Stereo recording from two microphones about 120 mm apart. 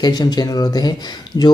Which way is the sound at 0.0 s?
35° left (ahead or behind).